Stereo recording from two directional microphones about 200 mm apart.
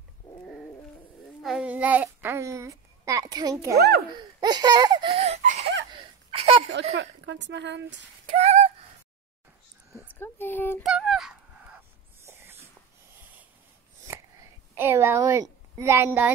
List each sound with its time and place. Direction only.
1.4 s a child's voice: 5° right (ahead or behind); by 3.7 s 20° right (ahead or behind)
3.7 s speech: 55° right (ahead or behind)
4.1 s laughter: 20° right (ahead or behind)
6.7 s speech: 60° right (ahead or behind)
8.3 s a sound: 35° right (ahead or behind)
10.1 s speech: 10° left (ahead or behind)
10.8 s dog: centre (ahead or behind)
12.2 s dog: 10° right (ahead or behind)
14.8 s a woman's voice: 10° right (ahead or behind)